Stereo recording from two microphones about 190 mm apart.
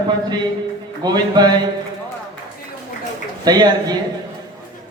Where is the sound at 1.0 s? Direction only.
20° right (ahead or behind).